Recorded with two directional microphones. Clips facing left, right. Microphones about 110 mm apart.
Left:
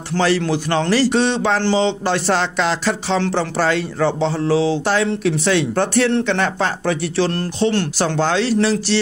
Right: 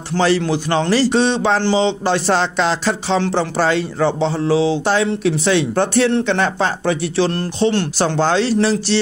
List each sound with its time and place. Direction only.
0.2 s speech: 20° right (ahead or behind)